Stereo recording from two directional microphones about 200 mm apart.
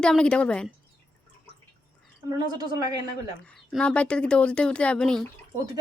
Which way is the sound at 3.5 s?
5° left (ahead or behind).